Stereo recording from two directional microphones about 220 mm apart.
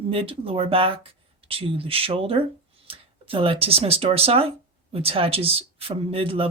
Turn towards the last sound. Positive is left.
turn(degrees=-25)  # may be behind; listen again after turning